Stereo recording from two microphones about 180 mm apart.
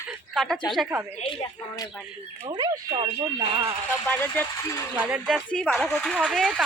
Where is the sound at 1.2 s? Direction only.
30° left (ahead or behind).